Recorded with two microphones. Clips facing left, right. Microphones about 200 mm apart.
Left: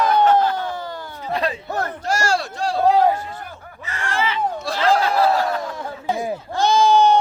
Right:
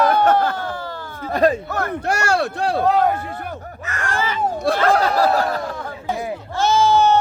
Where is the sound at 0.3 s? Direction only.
50° right (ahead or behind).